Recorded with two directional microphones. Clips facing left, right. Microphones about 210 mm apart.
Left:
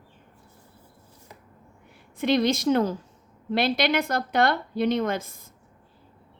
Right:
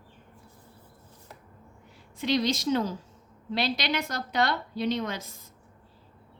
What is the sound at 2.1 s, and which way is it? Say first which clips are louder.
A woman's voice: left 4 dB; 55° left (ahead or behind).